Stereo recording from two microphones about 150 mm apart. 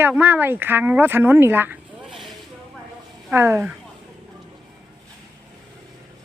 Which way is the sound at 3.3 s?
15° right (ahead or behind).